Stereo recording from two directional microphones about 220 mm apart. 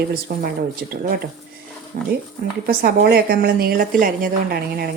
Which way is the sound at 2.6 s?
40° right (ahead or behind).